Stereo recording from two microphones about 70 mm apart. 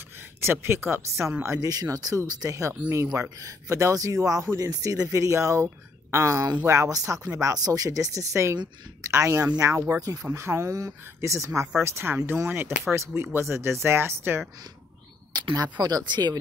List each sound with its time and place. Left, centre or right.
0.4 s speech: right
1.7 s speech: right
2.2 s speech: right
9.9 s speech: right
10.2 s speech: right
15.3 s speech: right
16.1 s speech: right